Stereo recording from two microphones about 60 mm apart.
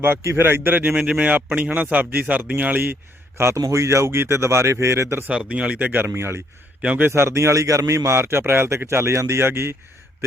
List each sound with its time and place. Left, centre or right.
0.3 s speech: right
0.9 s speech: centre; by 5.2 s right
5.3 s speech: centre
6.1 s speech: right